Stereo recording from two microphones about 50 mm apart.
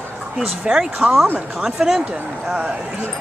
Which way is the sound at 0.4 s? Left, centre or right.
Centre.